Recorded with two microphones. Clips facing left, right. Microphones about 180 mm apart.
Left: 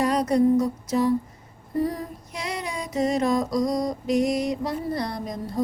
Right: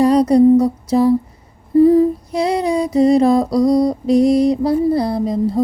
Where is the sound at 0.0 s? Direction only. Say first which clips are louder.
Right 10 dB; 35° right (ahead or behind).